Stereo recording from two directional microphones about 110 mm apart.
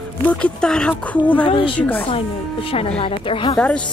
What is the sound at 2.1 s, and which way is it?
A woman's voice, 55° left (ahead or behind).